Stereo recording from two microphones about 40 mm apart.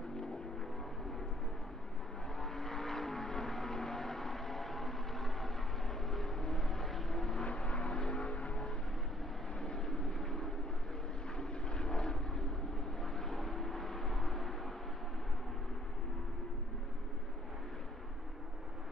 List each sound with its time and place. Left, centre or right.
2.3 s vehicle: centre
7.4 s vehicle: left
9.6 s vehicle: centre